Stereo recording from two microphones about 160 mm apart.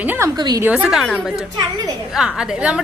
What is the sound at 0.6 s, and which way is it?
Speech, 5° right (ahead or behind).